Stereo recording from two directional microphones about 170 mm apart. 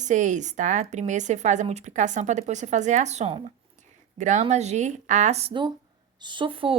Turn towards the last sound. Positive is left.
turn(degrees=-30)  # may be behind; listen again after turning